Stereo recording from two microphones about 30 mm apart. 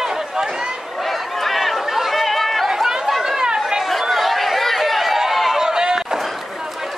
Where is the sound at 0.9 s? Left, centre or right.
Centre.